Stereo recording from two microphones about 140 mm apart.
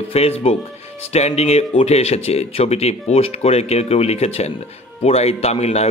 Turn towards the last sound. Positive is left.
turn(degrees=50)  # may be behind; listen again after turning